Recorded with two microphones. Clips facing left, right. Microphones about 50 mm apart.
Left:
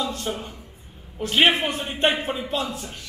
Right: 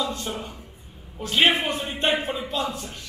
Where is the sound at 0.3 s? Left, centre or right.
Centre.